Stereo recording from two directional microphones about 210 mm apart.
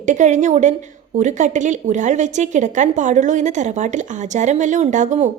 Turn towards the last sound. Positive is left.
turn(degrees=-35)  # may be behind; listen again after turning